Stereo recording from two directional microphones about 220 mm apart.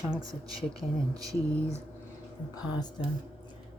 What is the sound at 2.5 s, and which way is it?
Speech, 20° left (ahead or behind).